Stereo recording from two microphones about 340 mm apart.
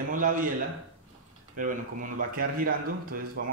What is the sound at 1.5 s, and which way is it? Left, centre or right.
A man's voice, right.